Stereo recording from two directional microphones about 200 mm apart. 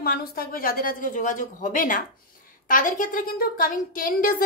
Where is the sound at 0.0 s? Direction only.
50° left (ahead or behind).